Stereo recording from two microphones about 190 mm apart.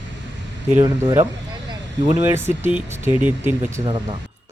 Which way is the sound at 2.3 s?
10° right (ahead or behind).